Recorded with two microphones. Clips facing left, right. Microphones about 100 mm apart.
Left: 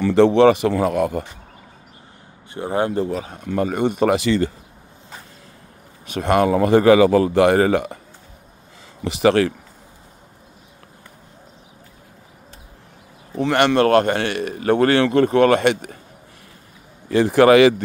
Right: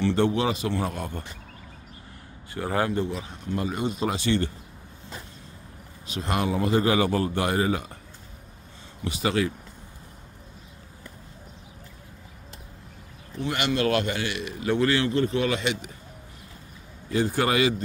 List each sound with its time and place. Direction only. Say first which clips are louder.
0.1 s speech: left 11 dB; 90° left
2.5 s speech: left 5 dB; 20° left (ahead or behind)
2.9 s speech: left 5 dB; 40° left (ahead or behind); by 4.3 s 70° left (ahead or behind)
6.0 s speech: left 10 dB; 60° left (ahead or behind)
9.0 s a man's voice: left 9 dB; 80° left
13.4 s speech: left 10 dB; 65° left (ahead or behind)
17.1 s a man's voice: left 11 dB; 90° left